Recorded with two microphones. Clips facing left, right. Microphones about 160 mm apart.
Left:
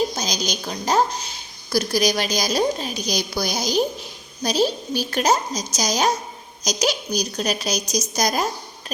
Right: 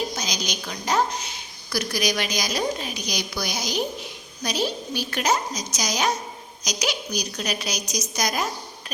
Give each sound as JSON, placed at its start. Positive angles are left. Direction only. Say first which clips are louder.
{"t": 0.2, "sound": "a woman's voice", "louder": "left 4 dB", "side_deg": 35}